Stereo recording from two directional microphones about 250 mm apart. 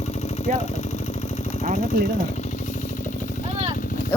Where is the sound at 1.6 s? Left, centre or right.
Right.